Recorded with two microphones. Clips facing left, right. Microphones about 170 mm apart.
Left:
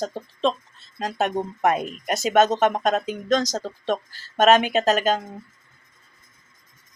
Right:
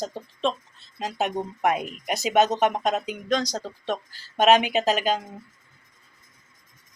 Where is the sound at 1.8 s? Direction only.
45° left (ahead or behind).